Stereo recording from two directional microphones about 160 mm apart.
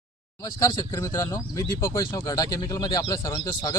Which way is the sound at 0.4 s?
25° left (ahead or behind).